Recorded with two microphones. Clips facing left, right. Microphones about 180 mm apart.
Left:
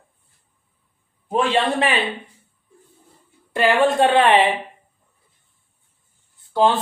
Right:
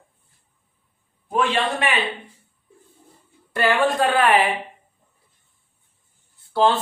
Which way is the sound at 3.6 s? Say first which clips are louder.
Left 3 dB; 20° left (ahead or behind).